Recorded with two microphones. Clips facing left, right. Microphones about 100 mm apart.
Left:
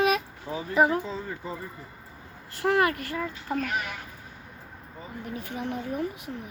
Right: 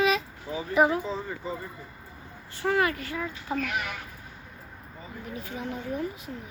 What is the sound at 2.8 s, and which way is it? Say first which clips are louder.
Speech: left 2 dB; 55° left (ahead or behind).